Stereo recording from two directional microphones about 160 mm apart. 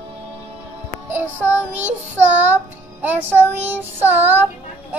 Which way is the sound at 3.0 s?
15° right (ahead or behind).